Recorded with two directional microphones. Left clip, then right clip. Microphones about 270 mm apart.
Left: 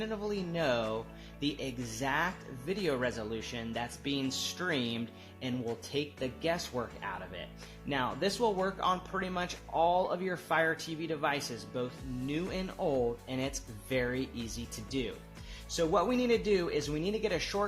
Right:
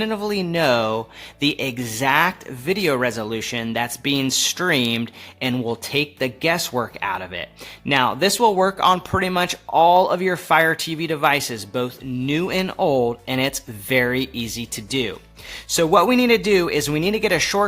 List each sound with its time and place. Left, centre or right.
0.0 s speech: right